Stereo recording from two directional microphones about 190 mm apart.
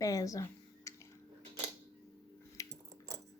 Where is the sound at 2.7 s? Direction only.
15° right (ahead or behind).